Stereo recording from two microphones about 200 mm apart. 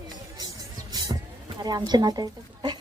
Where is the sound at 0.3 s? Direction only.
20° right (ahead or behind).